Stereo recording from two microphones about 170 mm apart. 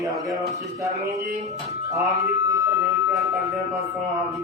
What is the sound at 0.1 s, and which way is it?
Speech, centre (ahead or behind).